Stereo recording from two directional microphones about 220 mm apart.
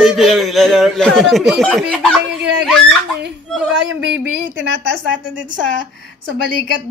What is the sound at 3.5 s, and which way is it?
Speech, 5° right (ahead or behind).